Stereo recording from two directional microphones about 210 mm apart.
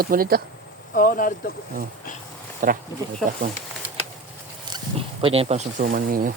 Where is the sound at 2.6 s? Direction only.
40° right (ahead or behind).